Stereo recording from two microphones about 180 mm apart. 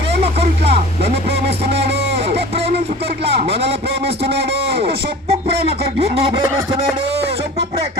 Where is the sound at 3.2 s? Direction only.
30° right (ahead or behind).